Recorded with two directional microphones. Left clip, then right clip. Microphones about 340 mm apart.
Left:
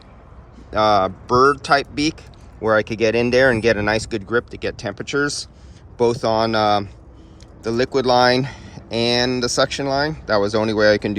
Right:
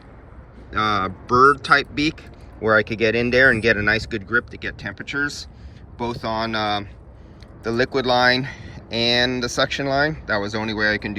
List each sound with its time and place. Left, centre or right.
0.7 s speech: centre